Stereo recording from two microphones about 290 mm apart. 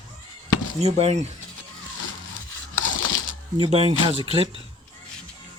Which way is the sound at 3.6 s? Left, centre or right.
Centre.